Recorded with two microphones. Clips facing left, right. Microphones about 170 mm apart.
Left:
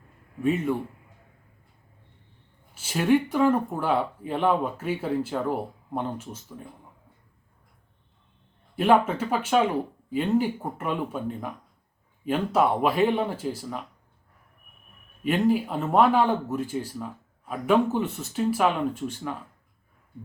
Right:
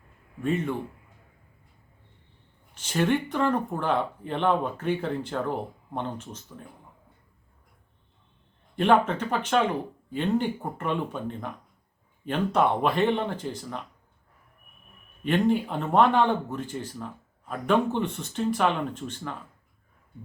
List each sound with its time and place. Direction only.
0.4 s speech: 10° left (ahead or behind)
2.7 s speech: 5° left (ahead or behind)
8.7 s speech: 5° left (ahead or behind)
15.2 s speech: 5° left (ahead or behind)